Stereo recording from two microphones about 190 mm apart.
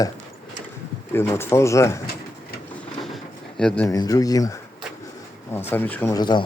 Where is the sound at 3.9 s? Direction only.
20° left (ahead or behind).